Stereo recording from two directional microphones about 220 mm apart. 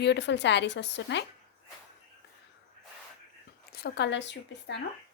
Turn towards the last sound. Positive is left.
turn(degrees=55)  # may be behind; listen again after turning